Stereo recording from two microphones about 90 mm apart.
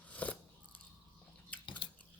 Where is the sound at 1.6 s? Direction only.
65° left (ahead or behind).